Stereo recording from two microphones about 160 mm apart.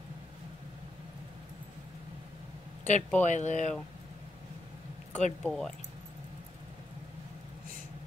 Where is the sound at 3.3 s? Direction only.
50° left (ahead or behind).